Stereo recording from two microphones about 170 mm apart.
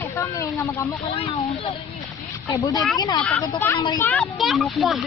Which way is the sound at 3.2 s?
Centre (ahead or behind).